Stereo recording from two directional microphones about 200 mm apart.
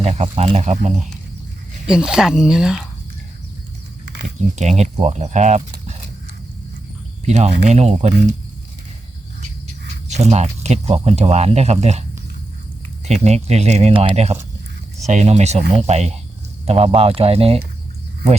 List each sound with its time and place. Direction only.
0.0 s speech: 30° right (ahead or behind)
1.9 s speech: 5° right (ahead or behind)
4.5 s speech: 35° right (ahead or behind)
7.3 s speech: 35° right (ahead or behind)
9.8 s speech: 35° right (ahead or behind)
13.1 s speech: 35° right (ahead or behind)